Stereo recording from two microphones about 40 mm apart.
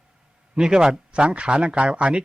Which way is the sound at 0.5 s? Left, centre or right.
Centre.